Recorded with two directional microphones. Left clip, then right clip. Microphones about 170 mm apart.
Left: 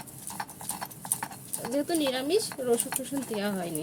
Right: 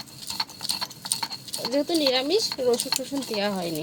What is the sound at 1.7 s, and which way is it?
Speech, 15° right (ahead or behind).